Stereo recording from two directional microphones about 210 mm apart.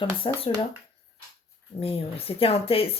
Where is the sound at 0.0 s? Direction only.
25° left (ahead or behind).